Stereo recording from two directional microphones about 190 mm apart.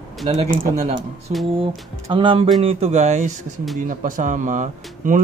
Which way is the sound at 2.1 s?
25° right (ahead or behind).